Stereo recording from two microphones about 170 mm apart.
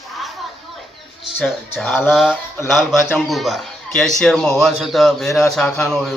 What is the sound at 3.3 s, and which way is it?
A man's voice, centre (ahead or behind).